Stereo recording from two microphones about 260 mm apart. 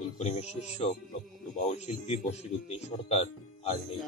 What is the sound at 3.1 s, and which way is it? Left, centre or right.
Music, left.